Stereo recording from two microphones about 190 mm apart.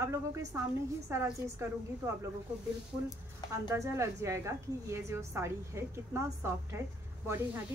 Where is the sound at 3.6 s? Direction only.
15° right (ahead or behind).